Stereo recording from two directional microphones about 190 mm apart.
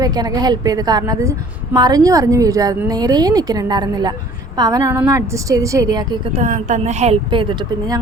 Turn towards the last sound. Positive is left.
turn(degrees=-25)  # may be behind; listen again after turning